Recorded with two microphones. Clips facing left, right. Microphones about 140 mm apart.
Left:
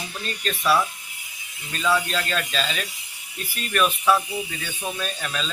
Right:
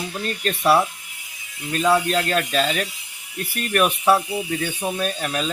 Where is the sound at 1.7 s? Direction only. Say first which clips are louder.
Right 5 dB; 50° right (ahead or behind).